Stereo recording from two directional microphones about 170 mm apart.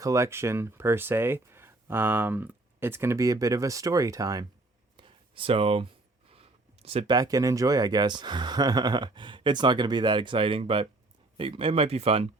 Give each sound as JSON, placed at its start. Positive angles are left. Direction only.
{"t": 0.0, "sound": "speech", "side_deg": -15}
{"t": 4.9, "sound": "a sound", "side_deg": -30}
{"t": 7.2, "sound": "speech", "side_deg": -20}